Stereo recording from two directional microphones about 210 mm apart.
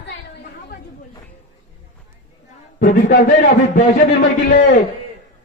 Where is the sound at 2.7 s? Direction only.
40° left (ahead or behind).